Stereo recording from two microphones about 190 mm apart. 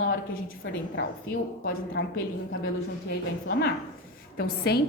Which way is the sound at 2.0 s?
65° left (ahead or behind).